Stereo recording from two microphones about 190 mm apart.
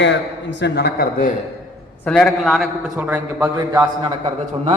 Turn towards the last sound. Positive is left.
turn(degrees=-25)  # may be behind; listen again after turning